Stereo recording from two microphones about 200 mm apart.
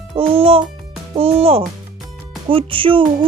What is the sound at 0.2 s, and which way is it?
Speech, 25° right (ahead or behind).